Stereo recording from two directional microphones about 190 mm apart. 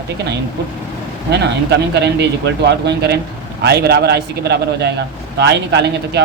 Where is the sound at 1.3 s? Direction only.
65° right (ahead or behind).